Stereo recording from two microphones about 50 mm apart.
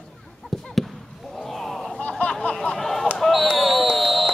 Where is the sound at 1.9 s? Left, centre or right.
Left.